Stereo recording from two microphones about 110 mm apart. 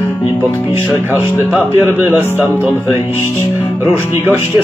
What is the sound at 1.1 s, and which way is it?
Speech, 20° right (ahead or behind).